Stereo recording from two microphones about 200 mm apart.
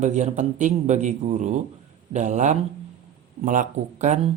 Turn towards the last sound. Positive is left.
turn(degrees=-35)  # may be behind; listen again after turning